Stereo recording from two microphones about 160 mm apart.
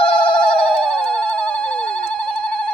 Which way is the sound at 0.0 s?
35° left (ahead or behind).